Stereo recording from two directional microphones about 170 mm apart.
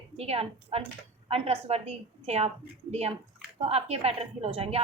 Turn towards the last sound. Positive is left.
turn(degrees=-35)  # may be behind; listen again after turning